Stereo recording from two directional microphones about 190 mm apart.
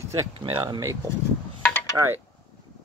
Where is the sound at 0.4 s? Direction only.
25° right (ahead or behind).